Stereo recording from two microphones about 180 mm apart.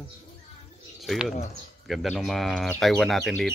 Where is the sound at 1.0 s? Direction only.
Centre (ahead or behind).